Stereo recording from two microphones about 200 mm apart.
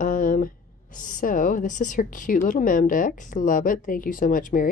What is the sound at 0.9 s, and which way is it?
Speech, 40° left (ahead or behind).